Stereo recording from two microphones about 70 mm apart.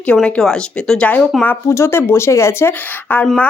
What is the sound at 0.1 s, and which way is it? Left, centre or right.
Speech, centre.